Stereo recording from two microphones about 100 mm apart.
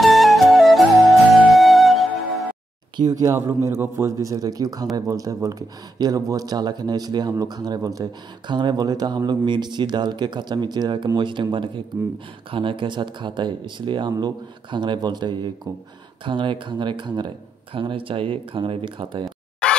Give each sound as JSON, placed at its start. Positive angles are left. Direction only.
{"t": 0.0, "sound": "music", "side_deg": 0}
{"t": 3.0, "sound": "a man's voice", "side_deg": -35}
{"t": 17.7, "sound": "speech", "side_deg": -60}
{"t": 19.6, "sound": "scratch", "side_deg": 10}